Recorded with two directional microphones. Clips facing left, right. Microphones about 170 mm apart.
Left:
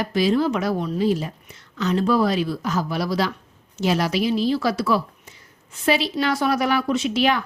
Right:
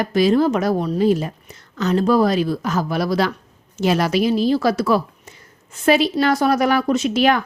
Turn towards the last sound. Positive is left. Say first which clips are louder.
# right 4 dB
turn(degrees=-50)  # may be behind; listen again after turning